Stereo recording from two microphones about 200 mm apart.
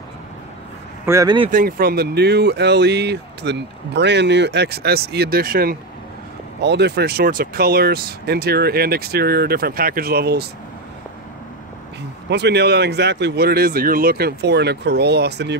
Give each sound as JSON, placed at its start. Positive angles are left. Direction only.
{"t": 1.0, "sound": "speech", "side_deg": -15}
{"t": 1.5, "sound": "speech", "side_deg": -45}
{"t": 12.3, "sound": "speech", "side_deg": -55}